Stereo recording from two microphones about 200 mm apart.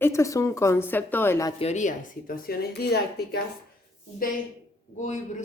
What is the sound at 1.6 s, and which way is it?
Speech, 35° left (ahead or behind).